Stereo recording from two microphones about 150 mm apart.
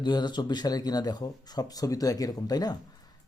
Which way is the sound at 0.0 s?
30° left (ahead or behind).